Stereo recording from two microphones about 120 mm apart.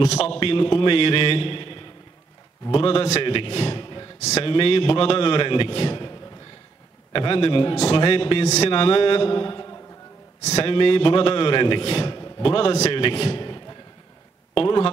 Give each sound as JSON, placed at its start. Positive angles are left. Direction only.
{"t": 0.0, "sound": "a man's voice", "side_deg": 55}
{"t": 4.2, "sound": "a man's voice", "side_deg": 60}
{"t": 10.4, "sound": "a man's voice", "side_deg": 55}